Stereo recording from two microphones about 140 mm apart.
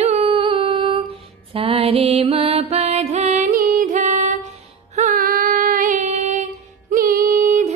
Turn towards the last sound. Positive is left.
turn(degrees=-70)  # may be behind; listen again after turning